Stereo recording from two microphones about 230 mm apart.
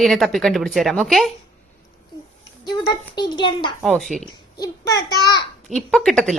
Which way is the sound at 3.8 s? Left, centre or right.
Centre.